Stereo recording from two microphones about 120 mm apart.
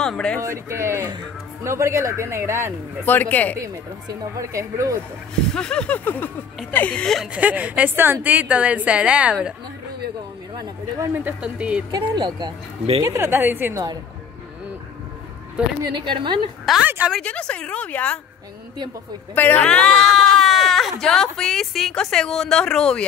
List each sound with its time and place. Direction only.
0.0 s speech: 5° left (ahead or behind)
0.4 s speech: 25° right (ahead or behind)
3.1 s speech: 15° left (ahead or behind)
3.5 s speech: 30° right (ahead or behind)
5.3 s speech: 5° left (ahead or behind)
7.3 s a woman's voice: 10° right (ahead or behind)
11.1 s a woman's voice: 10° right (ahead or behind)
11.9 s speech: 35° right (ahead or behind)
13.0 s speech: 25° right (ahead or behind)
15.8 s speech: 40° right (ahead or behind)
16.7 s a woman's voice: centre (ahead or behind)
17.2 s speech: 10° left (ahead or behind)
19.3 s speech: 15° left (ahead or behind)